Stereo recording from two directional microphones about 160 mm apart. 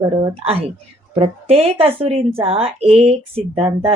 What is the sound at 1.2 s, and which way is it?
Speech, 40° right (ahead or behind).